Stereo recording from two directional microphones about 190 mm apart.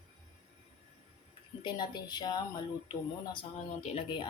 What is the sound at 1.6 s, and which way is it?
Speech, 20° left (ahead or behind).